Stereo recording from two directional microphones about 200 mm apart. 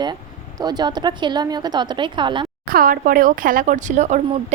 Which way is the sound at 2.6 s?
45° right (ahead or behind).